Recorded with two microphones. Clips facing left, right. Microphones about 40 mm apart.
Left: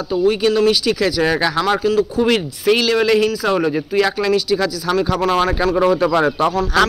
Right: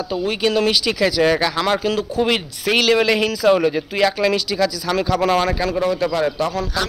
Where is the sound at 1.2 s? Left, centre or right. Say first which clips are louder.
Right 3 dB; centre.